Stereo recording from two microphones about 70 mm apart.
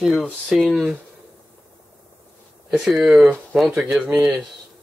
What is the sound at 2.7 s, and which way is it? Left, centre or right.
Speech, centre.